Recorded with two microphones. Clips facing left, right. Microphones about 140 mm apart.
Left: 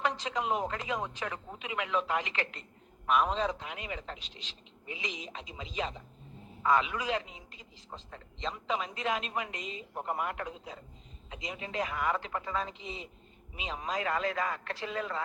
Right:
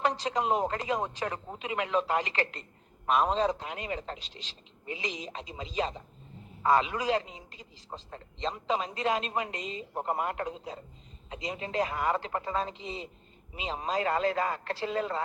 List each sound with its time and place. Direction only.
0.0 s a man's voice: 35° right (ahead or behind)